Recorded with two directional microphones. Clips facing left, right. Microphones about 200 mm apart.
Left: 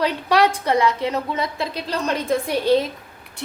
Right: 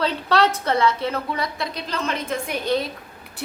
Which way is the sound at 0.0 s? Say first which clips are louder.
Left 2 dB; 15° left (ahead or behind).